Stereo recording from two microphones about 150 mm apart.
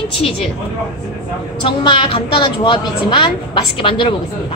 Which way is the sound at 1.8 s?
35° left (ahead or behind).